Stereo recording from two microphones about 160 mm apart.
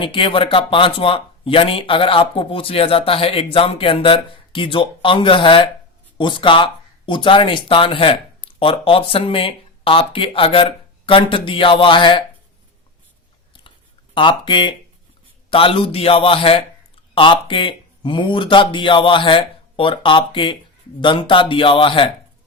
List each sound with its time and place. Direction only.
0.0 s speech: 35° left (ahead or behind)
13.5 s a sound: 30° left (ahead or behind)
15.4 s speech: 35° left (ahead or behind)